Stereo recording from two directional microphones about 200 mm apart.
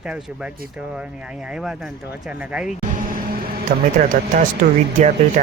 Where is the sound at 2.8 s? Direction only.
40° right (ahead or behind).